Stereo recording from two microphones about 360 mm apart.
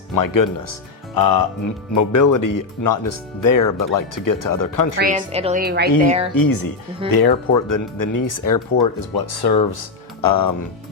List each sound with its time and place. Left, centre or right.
0.1 s speech: left
1.9 s speech: left
4.9 s a woman's voice: right
6.1 s speech: centre
6.3 s speech: left
7.1 s speech: left
8.8 s speech: left
10.2 s speech: left